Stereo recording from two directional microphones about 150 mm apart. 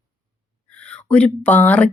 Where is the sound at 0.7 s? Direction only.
5° left (ahead or behind).